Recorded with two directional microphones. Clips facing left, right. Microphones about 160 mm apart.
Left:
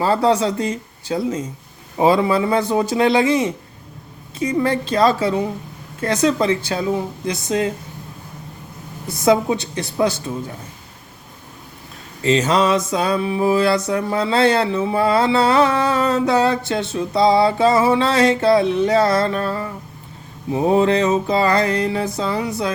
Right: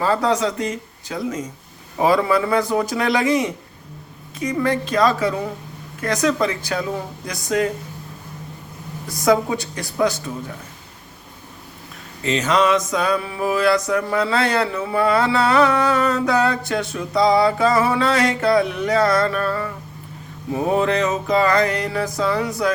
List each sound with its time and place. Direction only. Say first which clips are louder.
0.0 s speech: left 2 dB; 30° left (ahead or behind)
2.0 s mantra: left 2 dB; 25° left (ahead or behind)
4.6 s mantra: left 1 dB; 30° left (ahead or behind)
9.0 s mantra: left 2 dB; 25° left (ahead or behind)
12.2 s mantra: left 2 dB; 30° left (ahead or behind)